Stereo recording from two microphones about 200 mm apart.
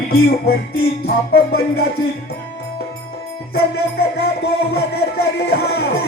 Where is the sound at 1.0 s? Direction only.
50° left (ahead or behind).